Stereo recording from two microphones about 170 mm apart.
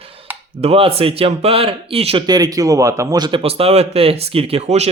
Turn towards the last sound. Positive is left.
turn(degrees=-35)  # may be behind; listen again after turning